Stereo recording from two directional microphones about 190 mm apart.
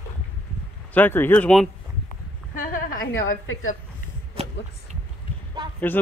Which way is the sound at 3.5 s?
90° left.